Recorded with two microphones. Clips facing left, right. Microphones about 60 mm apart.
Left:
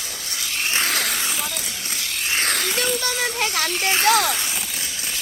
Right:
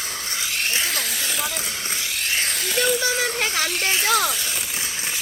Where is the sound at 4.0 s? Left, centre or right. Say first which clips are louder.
Left 4 dB; left.